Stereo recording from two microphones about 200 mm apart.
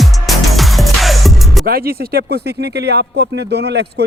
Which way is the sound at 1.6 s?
50° right (ahead or behind).